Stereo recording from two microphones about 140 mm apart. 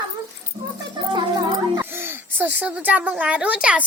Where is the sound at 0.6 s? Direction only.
20° right (ahead or behind).